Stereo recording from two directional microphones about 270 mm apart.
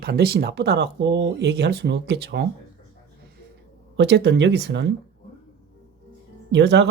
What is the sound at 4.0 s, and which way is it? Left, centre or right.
Speech, right.